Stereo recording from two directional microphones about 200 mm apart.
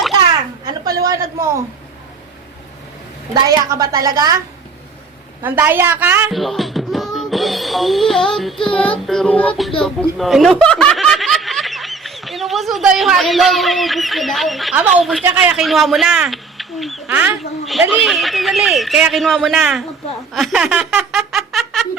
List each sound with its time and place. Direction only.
0.6 s a sound: 20° right (ahead or behind)
3.7 s a woman's voice: 15° right (ahead or behind)
5.4 s a woman's voice: 10° right (ahead or behind)
6.3 s music: centre (ahead or behind)
8.6 s a man's voice: 5° left (ahead or behind)